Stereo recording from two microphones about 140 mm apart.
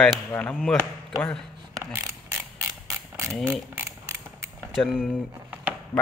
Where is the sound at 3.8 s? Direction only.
20° right (ahead or behind).